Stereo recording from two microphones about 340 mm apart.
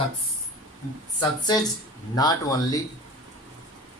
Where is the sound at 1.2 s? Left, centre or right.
Centre.